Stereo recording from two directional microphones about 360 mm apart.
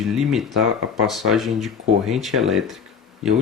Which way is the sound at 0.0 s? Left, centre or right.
Centre.